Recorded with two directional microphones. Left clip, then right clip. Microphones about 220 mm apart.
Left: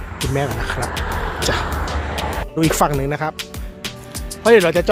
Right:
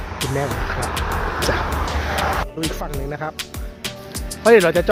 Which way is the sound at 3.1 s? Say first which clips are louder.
Left 5 dB; 20° left (ahead or behind).